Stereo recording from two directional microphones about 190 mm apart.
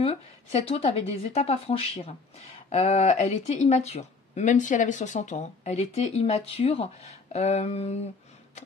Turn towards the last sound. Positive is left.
turn(degrees=35)  # may be behind; listen again after turning